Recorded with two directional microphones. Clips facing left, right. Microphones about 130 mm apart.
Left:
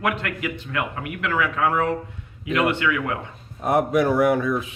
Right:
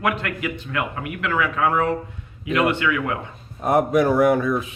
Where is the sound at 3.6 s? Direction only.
45° right (ahead or behind).